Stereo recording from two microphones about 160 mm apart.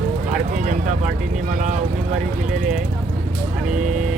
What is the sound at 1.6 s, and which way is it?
Speech, 50° right (ahead or behind).